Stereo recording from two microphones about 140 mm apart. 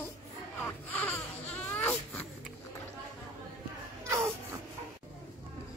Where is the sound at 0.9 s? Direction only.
10° left (ahead or behind).